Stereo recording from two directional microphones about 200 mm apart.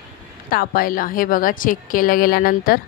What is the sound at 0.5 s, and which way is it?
A woman's voice, 45° left (ahead or behind).